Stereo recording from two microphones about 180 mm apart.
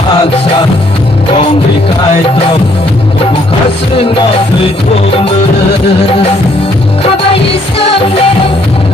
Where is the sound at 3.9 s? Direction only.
30° left (ahead or behind).